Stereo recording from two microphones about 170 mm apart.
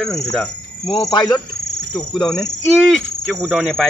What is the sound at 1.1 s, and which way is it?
Speech, 25° left (ahead or behind).